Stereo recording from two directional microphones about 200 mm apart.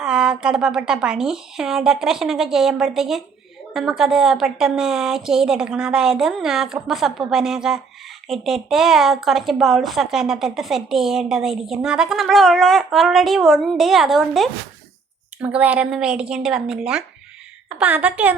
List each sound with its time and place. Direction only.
0.0 s a woman's voice: 5° right (ahead or behind)